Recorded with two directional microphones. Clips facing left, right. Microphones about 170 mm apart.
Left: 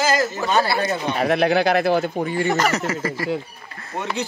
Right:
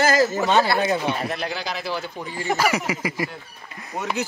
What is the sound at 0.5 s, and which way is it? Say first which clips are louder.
Speech: even; 5° left (ahead or behind).